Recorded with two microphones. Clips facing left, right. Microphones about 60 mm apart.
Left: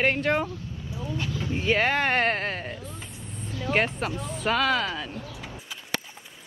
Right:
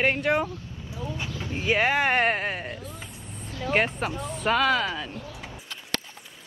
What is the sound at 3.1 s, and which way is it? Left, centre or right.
Vehicle, right.